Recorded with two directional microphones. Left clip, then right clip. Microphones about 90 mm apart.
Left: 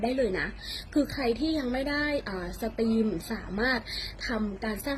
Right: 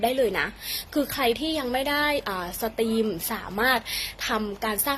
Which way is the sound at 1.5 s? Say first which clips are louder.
Right 4 dB; 25° left (ahead or behind).